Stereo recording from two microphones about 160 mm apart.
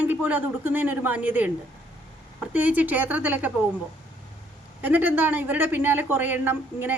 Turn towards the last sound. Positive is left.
turn(degrees=-10)  # may be behind; listen again after turning